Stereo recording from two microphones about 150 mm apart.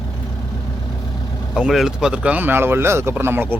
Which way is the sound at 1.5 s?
Centre (ahead or behind).